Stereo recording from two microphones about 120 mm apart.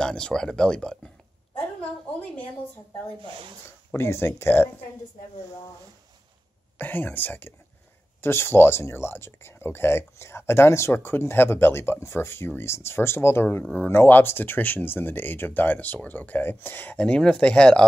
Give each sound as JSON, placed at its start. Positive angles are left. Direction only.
{"t": 0.0, "sound": "speech", "side_deg": 5}
{"t": 3.3, "sound": "speech", "side_deg": -45}
{"t": 3.9, "sound": "speech", "side_deg": 20}
{"t": 6.8, "sound": "speech", "side_deg": 15}